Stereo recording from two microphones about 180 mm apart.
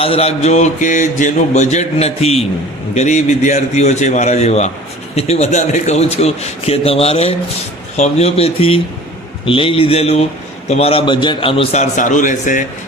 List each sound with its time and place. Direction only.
0.0 s mantra: 35° left (ahead or behind)